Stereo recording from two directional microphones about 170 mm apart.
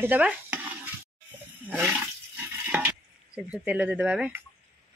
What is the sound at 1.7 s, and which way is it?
Speech, 10° right (ahead or behind).